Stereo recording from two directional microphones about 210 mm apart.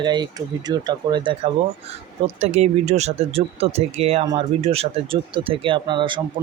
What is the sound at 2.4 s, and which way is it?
Speech, 30° right (ahead or behind).